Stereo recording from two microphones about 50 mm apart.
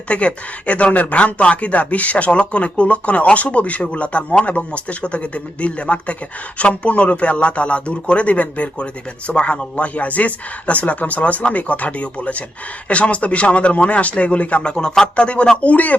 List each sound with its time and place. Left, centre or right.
0.1 s speech: left